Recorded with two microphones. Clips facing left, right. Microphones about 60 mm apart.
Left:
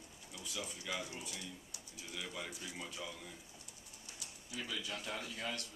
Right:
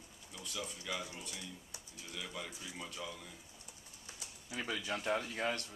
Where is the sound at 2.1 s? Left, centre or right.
Centre.